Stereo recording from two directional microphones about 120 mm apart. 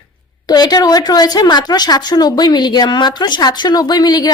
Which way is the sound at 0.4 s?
35° left (ahead or behind).